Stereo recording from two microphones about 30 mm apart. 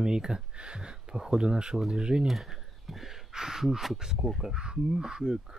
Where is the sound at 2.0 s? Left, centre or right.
Right.